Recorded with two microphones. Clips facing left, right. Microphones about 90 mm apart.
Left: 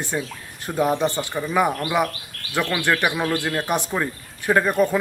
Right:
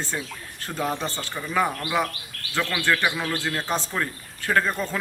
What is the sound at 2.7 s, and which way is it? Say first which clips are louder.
A man's voice: left 2 dB; 15° left (ahead or behind).